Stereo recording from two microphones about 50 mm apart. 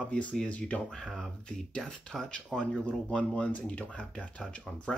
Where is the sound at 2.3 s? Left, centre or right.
Centre.